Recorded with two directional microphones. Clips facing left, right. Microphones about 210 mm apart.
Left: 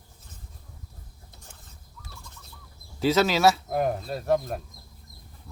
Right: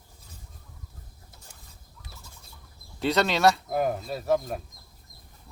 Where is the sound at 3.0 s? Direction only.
Centre (ahead or behind).